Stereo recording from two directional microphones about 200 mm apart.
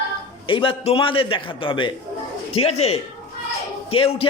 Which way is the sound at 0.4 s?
25° left (ahead or behind).